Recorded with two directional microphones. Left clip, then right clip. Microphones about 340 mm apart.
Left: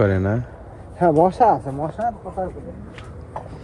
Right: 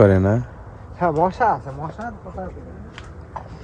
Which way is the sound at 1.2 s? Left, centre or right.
Left.